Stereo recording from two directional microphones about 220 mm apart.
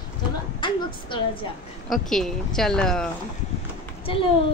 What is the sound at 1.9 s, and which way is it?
Speech, centre (ahead or behind).